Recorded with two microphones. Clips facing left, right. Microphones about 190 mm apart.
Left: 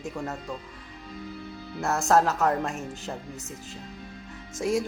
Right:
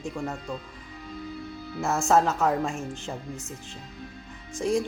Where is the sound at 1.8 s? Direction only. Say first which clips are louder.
Even; centre (ahead or behind).